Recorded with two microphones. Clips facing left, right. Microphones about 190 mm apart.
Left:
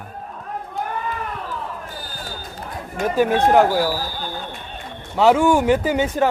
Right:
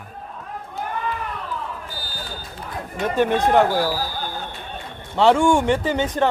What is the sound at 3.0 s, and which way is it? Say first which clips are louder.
Speech: left 2 dB; 45° left (ahead or behind).